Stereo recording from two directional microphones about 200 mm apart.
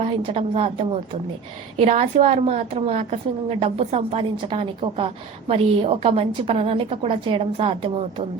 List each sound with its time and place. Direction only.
0.0 s a woman's voice: 30° right (ahead or behind)